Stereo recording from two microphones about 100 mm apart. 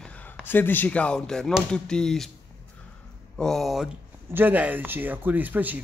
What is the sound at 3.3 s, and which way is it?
Speech, 5° left (ahead or behind).